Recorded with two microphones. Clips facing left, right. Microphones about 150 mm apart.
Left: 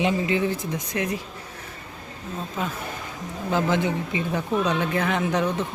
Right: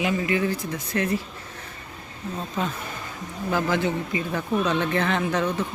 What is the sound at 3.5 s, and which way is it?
Speech, 20° left (ahead or behind).